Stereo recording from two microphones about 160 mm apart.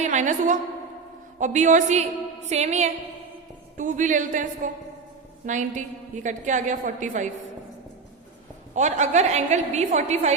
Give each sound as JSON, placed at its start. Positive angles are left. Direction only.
{"t": 0.0, "sound": "a woman's voice", "side_deg": -50}
{"t": 8.7, "sound": "a woman's voice", "side_deg": -45}